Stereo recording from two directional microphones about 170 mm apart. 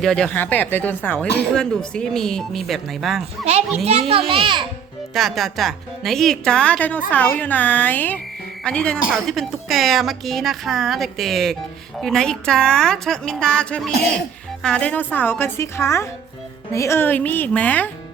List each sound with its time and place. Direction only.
0.0 s a woman's voice: 5° left (ahead or behind)
4.1 s a child's voice: 30° right (ahead or behind)
5.1 s a woman's voice: centre (ahead or behind)